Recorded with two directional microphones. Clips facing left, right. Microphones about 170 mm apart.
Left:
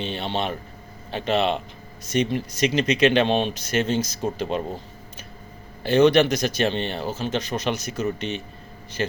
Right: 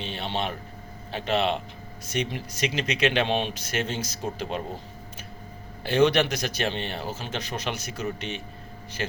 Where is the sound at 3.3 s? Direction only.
45° left (ahead or behind).